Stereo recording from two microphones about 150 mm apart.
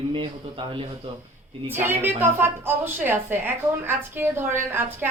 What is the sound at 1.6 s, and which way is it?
A woman's voice, 15° right (ahead or behind).